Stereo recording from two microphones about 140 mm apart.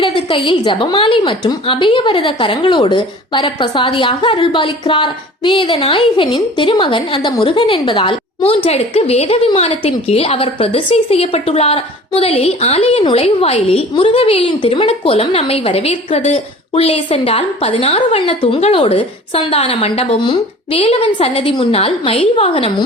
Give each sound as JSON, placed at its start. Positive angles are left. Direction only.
{"t": 0.0, "sound": "a woman's voice", "side_deg": 35}